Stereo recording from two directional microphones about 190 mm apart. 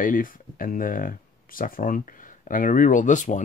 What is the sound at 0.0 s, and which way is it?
Speech, 45° left (ahead or behind).